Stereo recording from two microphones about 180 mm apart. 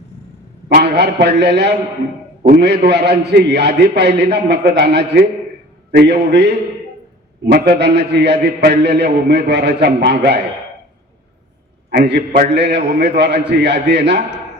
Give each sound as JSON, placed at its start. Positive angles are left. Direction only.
{"t": 0.7, "sound": "a man's voice", "side_deg": -65}
{"t": 5.9, "sound": "a man's voice", "side_deg": -70}
{"t": 11.9, "sound": "a man's voice", "side_deg": -65}